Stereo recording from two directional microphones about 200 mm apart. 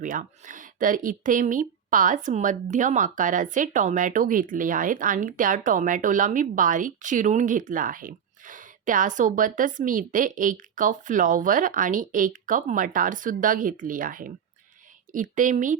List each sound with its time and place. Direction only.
0.0 s speech: 40° right (ahead or behind)